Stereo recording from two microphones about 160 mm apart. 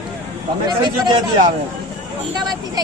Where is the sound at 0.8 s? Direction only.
30° right (ahead or behind).